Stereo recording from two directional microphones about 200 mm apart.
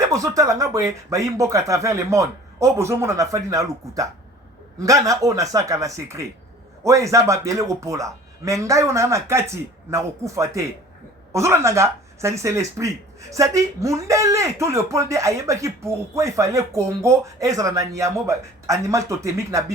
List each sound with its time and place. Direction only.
0.0 s speech: 15° right (ahead or behind)